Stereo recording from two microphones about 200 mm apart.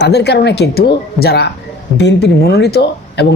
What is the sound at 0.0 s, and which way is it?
Speech, 55° left (ahead or behind).